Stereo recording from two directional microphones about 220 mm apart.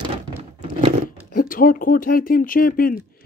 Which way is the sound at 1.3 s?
40° left (ahead or behind).